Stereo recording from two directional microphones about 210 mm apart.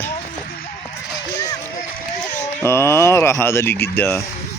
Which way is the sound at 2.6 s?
10° left (ahead or behind).